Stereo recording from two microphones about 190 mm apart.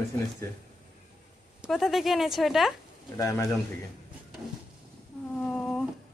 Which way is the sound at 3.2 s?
15° left (ahead or behind).